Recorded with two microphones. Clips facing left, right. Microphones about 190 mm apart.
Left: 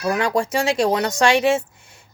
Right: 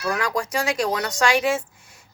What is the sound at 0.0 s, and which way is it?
Speech, 25° left (ahead or behind).